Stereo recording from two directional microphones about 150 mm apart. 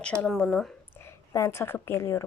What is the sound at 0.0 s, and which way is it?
Speech, 5° left (ahead or behind).